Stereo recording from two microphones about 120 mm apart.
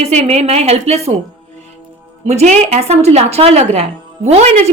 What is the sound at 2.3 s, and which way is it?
A woman's voice, 65° right (ahead or behind).